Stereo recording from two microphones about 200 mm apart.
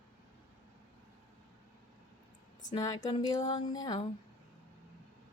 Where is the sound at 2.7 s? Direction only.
20° left (ahead or behind).